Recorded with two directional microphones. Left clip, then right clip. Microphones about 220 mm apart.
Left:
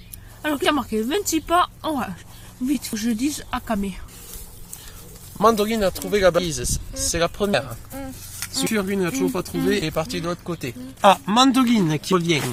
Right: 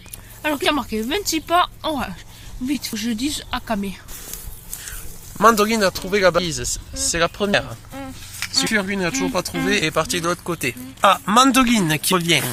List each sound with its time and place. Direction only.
0.4 s speech: 40° left (ahead or behind)
5.4 s speech: centre (ahead or behind)
7.9 s a sound: 30° left (ahead or behind)
8.5 s speech: centre (ahead or behind)